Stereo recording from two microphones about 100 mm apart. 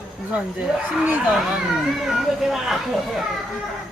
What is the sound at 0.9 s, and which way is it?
Speech, 10° right (ahead or behind).